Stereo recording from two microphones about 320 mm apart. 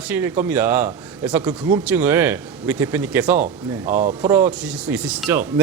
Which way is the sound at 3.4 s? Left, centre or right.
Right.